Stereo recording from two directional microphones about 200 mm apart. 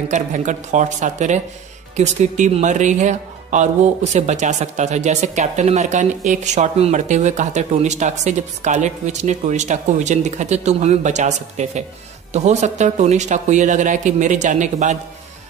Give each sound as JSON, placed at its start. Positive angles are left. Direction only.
{"t": 0.1, "sound": "speech", "side_deg": -40}